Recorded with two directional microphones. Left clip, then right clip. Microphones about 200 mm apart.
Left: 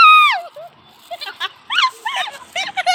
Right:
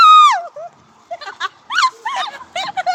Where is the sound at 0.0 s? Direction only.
10° right (ahead or behind).